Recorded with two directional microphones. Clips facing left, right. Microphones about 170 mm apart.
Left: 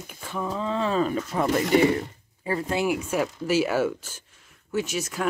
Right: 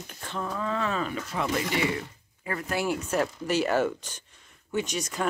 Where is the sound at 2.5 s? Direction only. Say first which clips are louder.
Left 3 dB; 25° left (ahead or behind).